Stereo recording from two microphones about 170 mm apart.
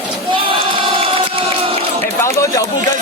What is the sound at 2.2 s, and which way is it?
Speech, 15° left (ahead or behind).